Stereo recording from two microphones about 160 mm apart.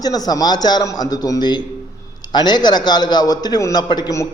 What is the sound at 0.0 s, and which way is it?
A man's voice, 25° left (ahead or behind).